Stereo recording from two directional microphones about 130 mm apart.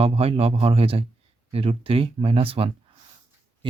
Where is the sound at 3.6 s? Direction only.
40° right (ahead or behind).